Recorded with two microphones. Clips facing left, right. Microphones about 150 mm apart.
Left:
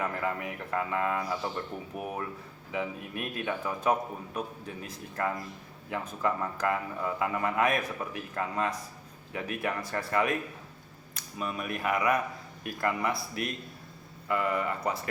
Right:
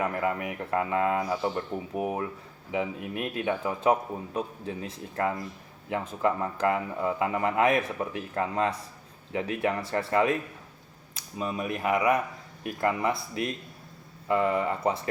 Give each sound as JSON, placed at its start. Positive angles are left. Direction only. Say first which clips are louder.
{"t": 0.0, "sound": "a man's voice", "louder": "right 4 dB", "side_deg": -20}
{"t": 11.3, "sound": "a man's voice", "louder": "right 3 dB", "side_deg": -25}